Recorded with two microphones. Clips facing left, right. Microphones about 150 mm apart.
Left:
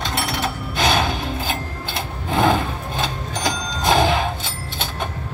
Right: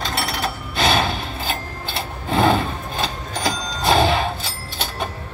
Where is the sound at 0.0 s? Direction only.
Centre (ahead or behind).